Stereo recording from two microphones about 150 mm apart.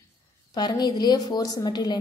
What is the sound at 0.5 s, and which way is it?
A woman's voice, 30° left (ahead or behind).